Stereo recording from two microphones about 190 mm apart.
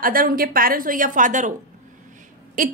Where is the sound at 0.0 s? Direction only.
50° right (ahead or behind).